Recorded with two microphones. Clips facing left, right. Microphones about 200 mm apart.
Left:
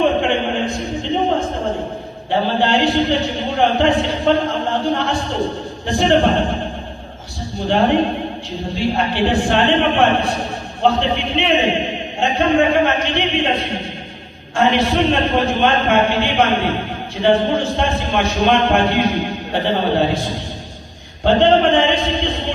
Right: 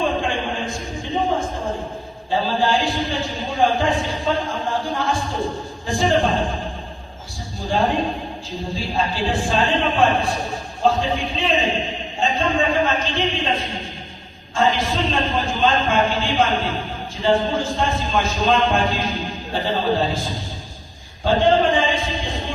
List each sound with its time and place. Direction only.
0.0 s a sound: 65° left (ahead or behind)
2.6 s a man's voice: 65° left (ahead or behind)
7.7 s a man's voice: 65° left (ahead or behind)